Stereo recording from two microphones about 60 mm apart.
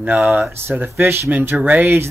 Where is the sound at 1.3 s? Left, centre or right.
Right.